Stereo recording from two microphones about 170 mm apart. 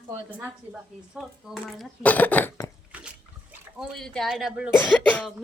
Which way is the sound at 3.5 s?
Centre (ahead or behind).